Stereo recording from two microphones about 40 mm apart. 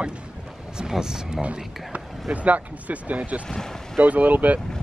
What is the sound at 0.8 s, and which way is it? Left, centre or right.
Speech, centre.